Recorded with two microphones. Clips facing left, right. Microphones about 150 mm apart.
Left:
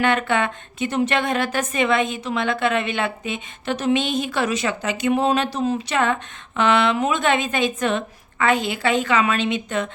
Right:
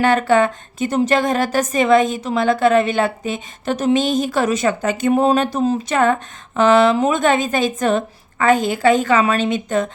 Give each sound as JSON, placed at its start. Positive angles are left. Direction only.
{"t": 0.0, "sound": "a woman's voice", "side_deg": -40}